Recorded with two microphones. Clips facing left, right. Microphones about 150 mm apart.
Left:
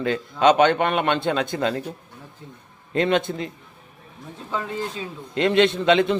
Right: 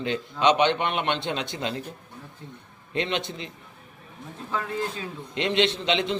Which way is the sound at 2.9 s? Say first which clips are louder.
Left 7 dB; 45° left (ahead or behind).